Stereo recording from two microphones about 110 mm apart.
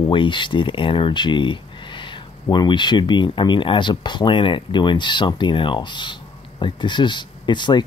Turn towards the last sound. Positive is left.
turn(degrees=45)  # may be behind; listen again after turning